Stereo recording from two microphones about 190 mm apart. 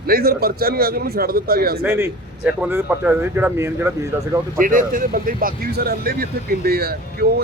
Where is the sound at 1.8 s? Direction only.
10° right (ahead or behind).